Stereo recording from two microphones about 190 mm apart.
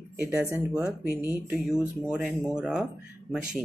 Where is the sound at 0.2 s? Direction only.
10° right (ahead or behind).